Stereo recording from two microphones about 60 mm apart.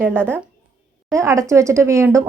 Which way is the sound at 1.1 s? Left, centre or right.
Right.